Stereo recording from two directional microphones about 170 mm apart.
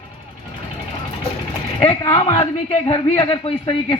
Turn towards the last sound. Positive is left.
turn(degrees=30)  # may be behind; listen again after turning